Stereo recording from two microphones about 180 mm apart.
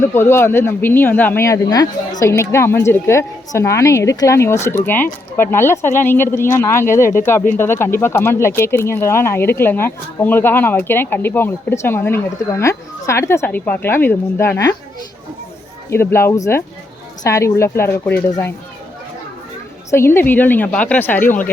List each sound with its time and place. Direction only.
0.0 s speech: 15° left (ahead or behind)
15.9 s speech: 15° left (ahead or behind)
19.9 s speech: 15° left (ahead or behind)